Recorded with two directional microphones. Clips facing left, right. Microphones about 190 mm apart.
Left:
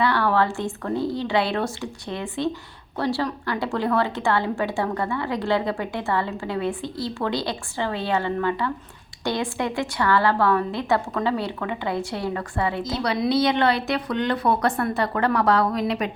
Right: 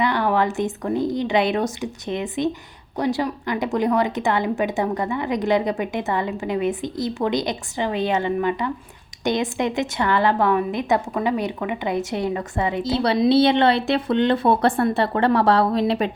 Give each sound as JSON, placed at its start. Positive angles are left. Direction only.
{"t": 0.0, "sound": "a woman's voice", "side_deg": -20}